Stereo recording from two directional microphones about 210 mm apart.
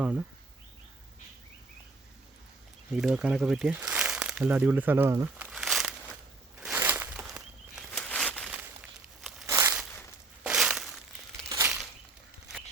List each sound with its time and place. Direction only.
0.0 s speech: 5° right (ahead or behind)
2.9 s speech: 5° right (ahead or behind)
6.6 s a sound: 5° right (ahead or behind)
8.5 s crumpling: 5° right (ahead or behind)
10.4 s crushing: 5° right (ahead or behind)
11.4 s crumpling: 15° right (ahead or behind)